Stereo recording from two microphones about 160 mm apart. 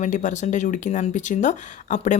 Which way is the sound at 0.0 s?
50° left (ahead or behind).